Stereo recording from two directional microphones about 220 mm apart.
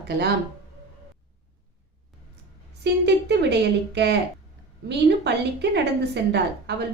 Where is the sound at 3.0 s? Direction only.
50° right (ahead or behind).